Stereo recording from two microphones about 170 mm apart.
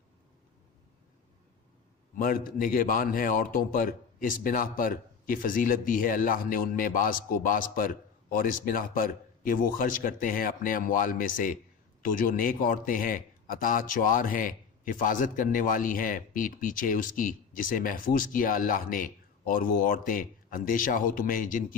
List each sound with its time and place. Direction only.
2.1 s a man's voice: 55° left (ahead or behind)